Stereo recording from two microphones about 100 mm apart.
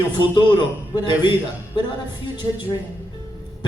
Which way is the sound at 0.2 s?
50° left (ahead or behind).